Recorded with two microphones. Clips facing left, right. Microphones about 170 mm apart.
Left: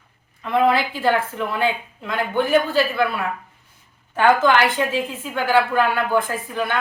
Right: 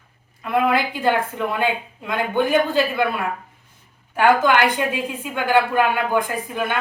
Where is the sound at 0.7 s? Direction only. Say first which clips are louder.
Even; 15° right (ahead or behind).